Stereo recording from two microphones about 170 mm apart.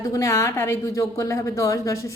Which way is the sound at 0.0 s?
20° left (ahead or behind).